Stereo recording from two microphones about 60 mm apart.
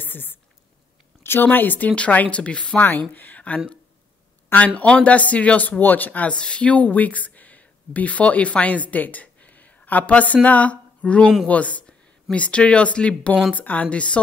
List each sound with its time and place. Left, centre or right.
0.0 s a sound: left
1.2 s speech: left; by 2.8 s centre
2.8 s speech: left
6.3 s speech: centre